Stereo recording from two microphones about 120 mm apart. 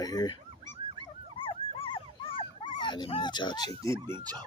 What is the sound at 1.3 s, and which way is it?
Dog, 50° left (ahead or behind).